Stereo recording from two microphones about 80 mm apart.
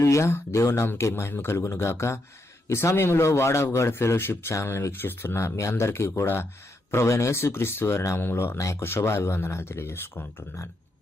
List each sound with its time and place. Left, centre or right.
0.0 s a man's voice: left